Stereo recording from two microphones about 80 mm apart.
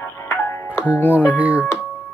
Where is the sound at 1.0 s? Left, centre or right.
Left.